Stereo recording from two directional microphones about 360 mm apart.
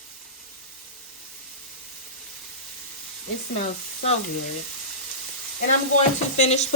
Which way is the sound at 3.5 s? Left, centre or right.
Centre.